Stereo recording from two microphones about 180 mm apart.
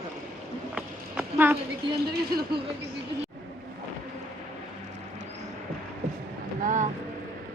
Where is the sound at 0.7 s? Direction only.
5° right (ahead or behind).